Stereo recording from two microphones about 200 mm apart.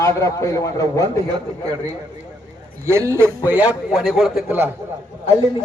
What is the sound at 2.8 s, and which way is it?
A man's voice, 15° right (ahead or behind).